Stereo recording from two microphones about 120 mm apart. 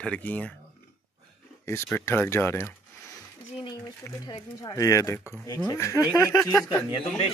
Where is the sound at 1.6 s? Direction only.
20° left (ahead or behind).